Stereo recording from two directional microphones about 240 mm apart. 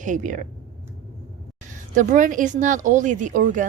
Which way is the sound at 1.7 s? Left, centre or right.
Right.